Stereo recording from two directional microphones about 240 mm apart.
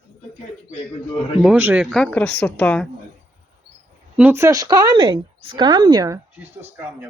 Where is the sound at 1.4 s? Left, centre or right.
Centre.